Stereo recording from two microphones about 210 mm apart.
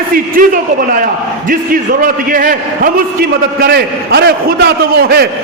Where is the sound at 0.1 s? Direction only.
40° right (ahead or behind).